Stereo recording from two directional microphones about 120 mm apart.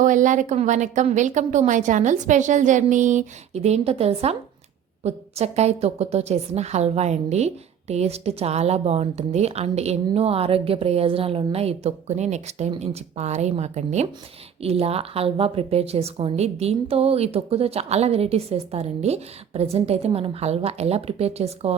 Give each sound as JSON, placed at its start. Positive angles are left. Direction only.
{"t": 0.0, "sound": "a woman's voice", "side_deg": -90}
{"t": 14.6, "sound": "a woman's voice", "side_deg": -55}